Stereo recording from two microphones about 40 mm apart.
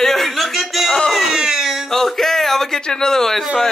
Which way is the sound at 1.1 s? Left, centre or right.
Centre.